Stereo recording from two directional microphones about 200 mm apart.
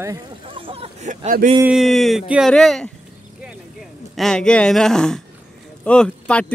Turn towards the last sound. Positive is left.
turn(degrees=5)  # may be behind; listen again after turning